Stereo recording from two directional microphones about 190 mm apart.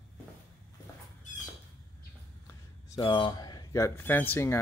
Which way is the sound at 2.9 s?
25° left (ahead or behind).